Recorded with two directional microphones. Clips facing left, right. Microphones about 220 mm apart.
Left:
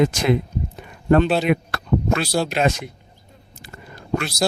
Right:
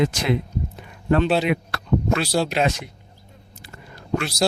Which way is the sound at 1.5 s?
50° left (ahead or behind).